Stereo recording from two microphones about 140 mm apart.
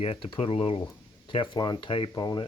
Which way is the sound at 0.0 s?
40° left (ahead or behind).